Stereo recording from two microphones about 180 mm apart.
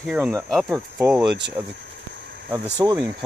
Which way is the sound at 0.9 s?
15° right (ahead or behind).